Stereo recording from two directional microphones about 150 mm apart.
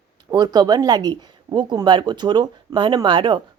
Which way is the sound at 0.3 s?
25° right (ahead or behind).